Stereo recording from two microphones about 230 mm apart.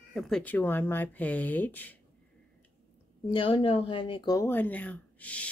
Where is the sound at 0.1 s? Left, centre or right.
Centre.